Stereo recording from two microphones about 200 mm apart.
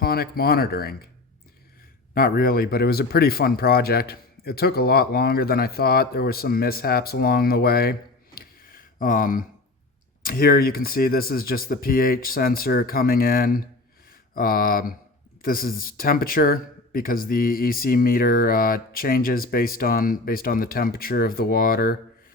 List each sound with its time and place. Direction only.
0.0 s speech: 50° left (ahead or behind)
2.1 s speech: 50° left (ahead or behind)
8.4 s a sound: 45° left (ahead or behind)
10.2 s speech: 45° left (ahead or behind)